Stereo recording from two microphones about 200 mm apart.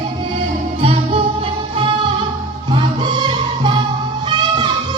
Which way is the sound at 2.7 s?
25° right (ahead or behind).